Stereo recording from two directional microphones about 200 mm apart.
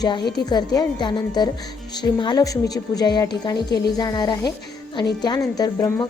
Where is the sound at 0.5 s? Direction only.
20° left (ahead or behind).